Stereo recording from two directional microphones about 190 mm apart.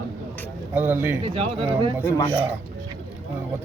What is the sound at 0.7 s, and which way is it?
Speech, 10° right (ahead or behind).